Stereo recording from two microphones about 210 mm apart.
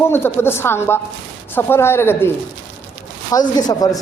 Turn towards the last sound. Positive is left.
turn(degrees=20)  # may be behind; listen again after turning